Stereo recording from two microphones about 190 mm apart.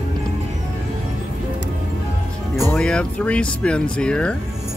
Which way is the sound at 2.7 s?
5° left (ahead or behind).